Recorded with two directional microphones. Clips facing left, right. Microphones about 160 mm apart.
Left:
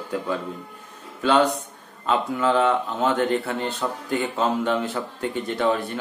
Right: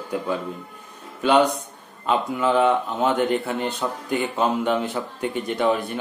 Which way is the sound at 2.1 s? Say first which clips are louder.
Even; 15° right (ahead or behind).